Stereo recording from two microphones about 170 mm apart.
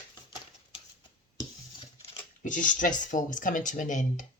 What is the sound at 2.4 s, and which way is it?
Speech, 50° left (ahead or behind).